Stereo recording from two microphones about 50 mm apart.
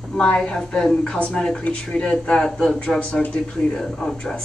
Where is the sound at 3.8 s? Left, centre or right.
Centre.